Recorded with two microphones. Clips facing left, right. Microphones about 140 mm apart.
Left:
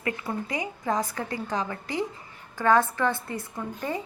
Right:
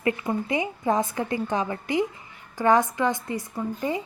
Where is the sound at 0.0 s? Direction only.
25° right (ahead or behind).